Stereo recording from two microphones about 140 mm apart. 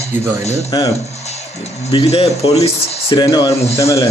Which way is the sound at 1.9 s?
45° left (ahead or behind).